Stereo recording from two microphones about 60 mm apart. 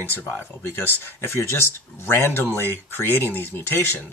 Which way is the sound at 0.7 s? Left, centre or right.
Left.